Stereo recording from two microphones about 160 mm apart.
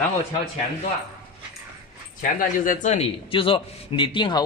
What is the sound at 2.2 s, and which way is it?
A man's voice, 55° left (ahead or behind).